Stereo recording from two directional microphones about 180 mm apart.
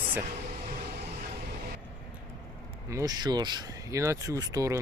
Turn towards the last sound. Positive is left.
turn(degrees=-20)  # may be behind; listen again after turning